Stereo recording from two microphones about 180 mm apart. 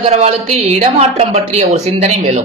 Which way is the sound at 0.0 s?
35° right (ahead or behind).